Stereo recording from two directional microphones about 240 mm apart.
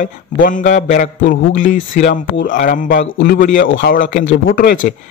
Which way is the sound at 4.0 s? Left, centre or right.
Left.